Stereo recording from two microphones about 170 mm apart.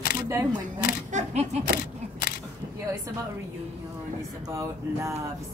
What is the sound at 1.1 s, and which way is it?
Speech, 45° right (ahead or behind).